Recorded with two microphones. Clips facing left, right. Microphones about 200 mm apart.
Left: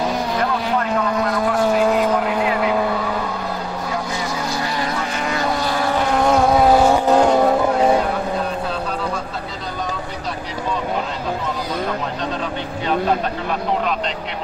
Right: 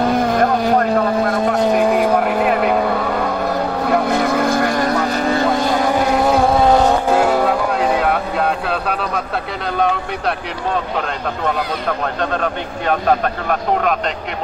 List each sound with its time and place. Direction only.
0.0 s vehicle: 55° right (ahead or behind); by 1.2 s 35° right (ahead or behind)
1.6 s vehicle: 15° right (ahead or behind)
2.1 s vehicle: 60° right (ahead or behind)
3.8 s vehicle: 60° right (ahead or behind); by 5.4 s 35° right (ahead or behind)
5.4 s vehicle: 50° right (ahead or behind)
6.2 s vehicle: centre (ahead or behind)
7.1 s vehicle: 5° right (ahead or behind)
8.0 s vehicle: 70° right (ahead or behind)
11.4 s a sound: 60° right (ahead or behind)